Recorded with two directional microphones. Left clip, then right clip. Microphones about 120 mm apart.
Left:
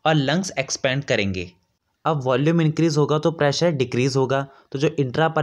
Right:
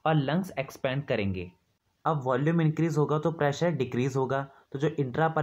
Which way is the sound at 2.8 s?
15° left (ahead or behind).